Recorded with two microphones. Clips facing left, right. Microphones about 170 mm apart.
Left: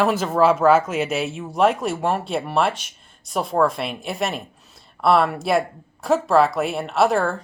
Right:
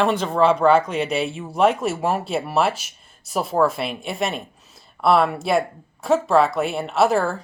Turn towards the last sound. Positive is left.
turn(degrees=0)  # may be behind; listen again after turning